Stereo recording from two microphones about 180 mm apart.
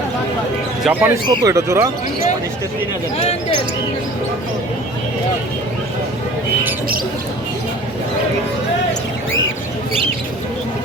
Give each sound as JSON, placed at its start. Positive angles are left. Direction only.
{"t": 0.9, "sound": "speech", "side_deg": -10}